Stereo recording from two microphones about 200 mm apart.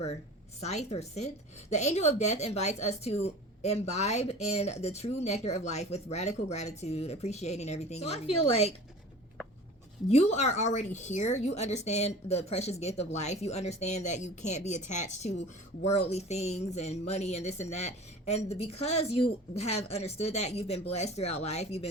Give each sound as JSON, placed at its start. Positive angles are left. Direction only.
{"t": 0.6, "sound": "a woman's voice", "side_deg": 35}
{"t": 10.1, "sound": "a woman's voice", "side_deg": 35}